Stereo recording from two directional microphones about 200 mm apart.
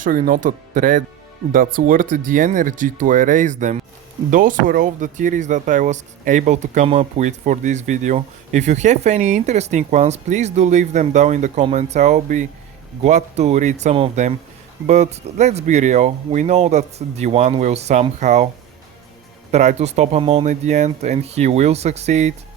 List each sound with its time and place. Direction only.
0.0 s speech: 45° right (ahead or behind)
19.5 s speech: 35° right (ahead or behind)